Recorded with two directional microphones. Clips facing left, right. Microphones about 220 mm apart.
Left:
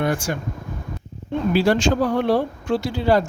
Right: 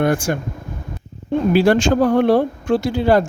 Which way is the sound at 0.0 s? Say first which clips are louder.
Right 5 dB; 50° right (ahead or behind).